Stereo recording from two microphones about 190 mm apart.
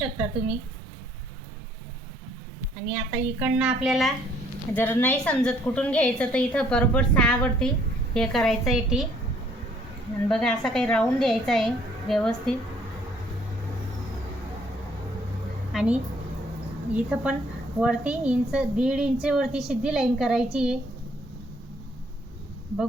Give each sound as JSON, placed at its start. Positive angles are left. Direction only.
{"t": 0.0, "sound": "a woman's voice", "side_deg": -5}
{"t": 2.9, "sound": "a woman's voice", "side_deg": -10}
{"t": 4.7, "sound": "a woman's voice", "side_deg": 10}
{"t": 10.2, "sound": "a woman's voice", "side_deg": 5}
{"t": 15.7, "sound": "a sound", "side_deg": -5}
{"t": 16.9, "sound": "a woman's voice", "side_deg": -5}